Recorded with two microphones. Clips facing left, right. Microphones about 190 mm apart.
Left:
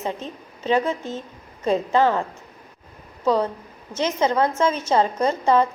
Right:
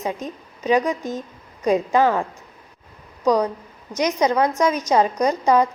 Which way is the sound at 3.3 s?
15° right (ahead or behind).